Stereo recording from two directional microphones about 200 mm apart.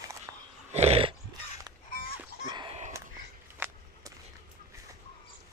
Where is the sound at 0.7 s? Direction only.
30° right (ahead or behind).